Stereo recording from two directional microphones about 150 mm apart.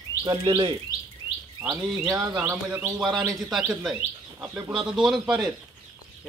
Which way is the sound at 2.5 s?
5° right (ahead or behind).